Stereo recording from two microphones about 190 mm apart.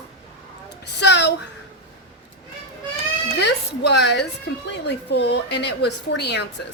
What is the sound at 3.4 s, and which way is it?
A woman's voice, 65° left (ahead or behind).